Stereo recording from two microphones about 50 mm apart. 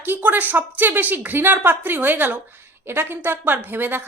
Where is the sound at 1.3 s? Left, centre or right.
Right.